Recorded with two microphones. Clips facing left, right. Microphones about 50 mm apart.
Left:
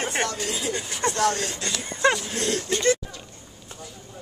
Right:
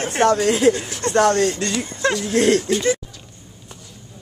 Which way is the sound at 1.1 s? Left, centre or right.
Right.